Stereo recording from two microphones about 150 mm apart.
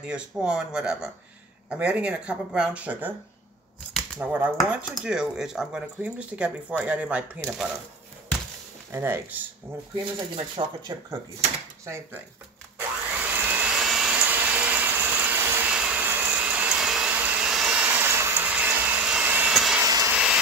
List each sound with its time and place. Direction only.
0.0 s speech: 5° right (ahead or behind)
4.2 s speech: 10° right (ahead or behind)
8.9 s speech: 15° right (ahead or behind)
10.1 s speech: 30° right (ahead or behind)
12.7 s vacuum cleaner: 15° right (ahead or behind)
19.8 s vacuum cleaner: 20° right (ahead or behind)
20.1 s vehicle: 5° right (ahead or behind)